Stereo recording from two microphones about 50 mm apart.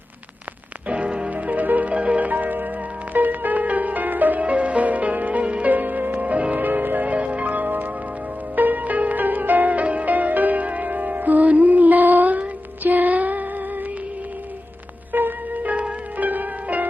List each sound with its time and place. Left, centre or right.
0.9 s music: right
15.1 s music: right